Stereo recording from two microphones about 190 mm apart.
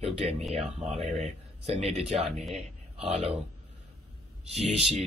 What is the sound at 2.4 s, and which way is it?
Speech, centre (ahead or behind).